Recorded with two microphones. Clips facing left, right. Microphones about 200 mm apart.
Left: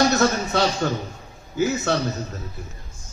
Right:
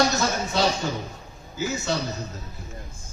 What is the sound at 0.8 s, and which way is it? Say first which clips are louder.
A man's voice: left 4 dB; 60° left (ahead or behind).